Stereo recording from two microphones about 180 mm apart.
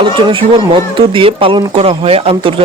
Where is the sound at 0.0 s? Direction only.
25° right (ahead or behind).